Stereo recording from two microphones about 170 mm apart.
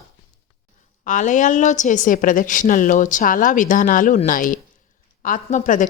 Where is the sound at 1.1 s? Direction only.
45° left (ahead or behind).